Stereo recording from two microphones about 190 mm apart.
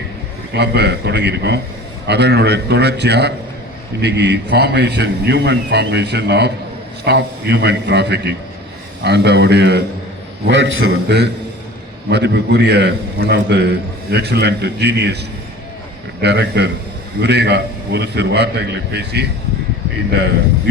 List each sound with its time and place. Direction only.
0.5 s a man's voice: 60° right (ahead or behind)
10.5 s a man's voice: 75° right (ahead or behind)
12.0 s a man's voice: 65° right (ahead or behind)
16.2 s a man's voice: 60° right (ahead or behind)